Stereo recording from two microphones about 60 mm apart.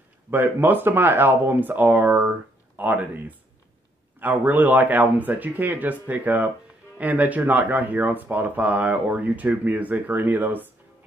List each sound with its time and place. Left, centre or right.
0.3 s speech: right